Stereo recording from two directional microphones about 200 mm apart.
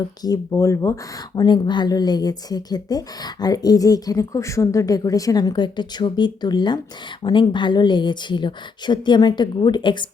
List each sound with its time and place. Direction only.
0.2 s a woman's voice: 15° left (ahead or behind)